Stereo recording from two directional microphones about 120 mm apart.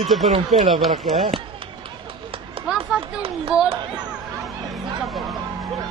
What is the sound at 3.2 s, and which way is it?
Speech, 50° right (ahead or behind).